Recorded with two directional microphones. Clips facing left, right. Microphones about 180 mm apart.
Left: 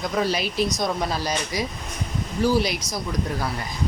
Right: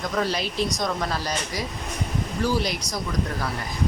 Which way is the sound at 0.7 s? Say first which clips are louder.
Left 2 dB; 10° left (ahead or behind).